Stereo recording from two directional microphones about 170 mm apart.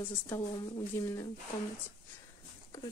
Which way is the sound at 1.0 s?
15° left (ahead or behind).